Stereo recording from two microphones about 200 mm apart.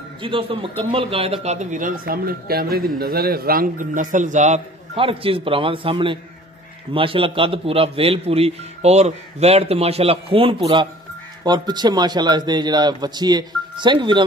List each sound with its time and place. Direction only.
0.2 s a man's voice: 25° right (ahead or behind)